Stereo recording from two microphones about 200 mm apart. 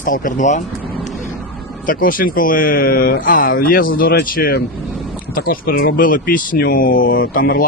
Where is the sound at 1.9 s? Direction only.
45° left (ahead or behind).